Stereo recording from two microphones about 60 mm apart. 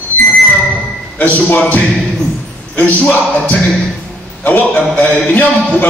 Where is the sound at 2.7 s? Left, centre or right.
Left.